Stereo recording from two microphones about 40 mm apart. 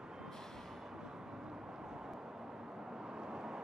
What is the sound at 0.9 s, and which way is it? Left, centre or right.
Vehicle, centre.